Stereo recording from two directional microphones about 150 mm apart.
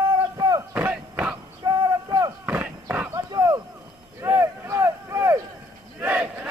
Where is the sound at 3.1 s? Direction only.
25° right (ahead or behind).